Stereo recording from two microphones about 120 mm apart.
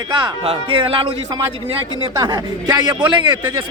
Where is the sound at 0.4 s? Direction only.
50° right (ahead or behind).